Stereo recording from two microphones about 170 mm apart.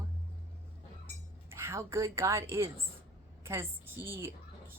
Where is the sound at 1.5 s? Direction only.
15° right (ahead or behind).